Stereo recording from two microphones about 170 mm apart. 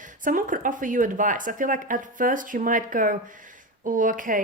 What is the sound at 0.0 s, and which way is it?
Speech, 50° right (ahead or behind).